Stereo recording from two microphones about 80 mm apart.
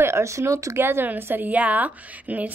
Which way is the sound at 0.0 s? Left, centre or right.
Right.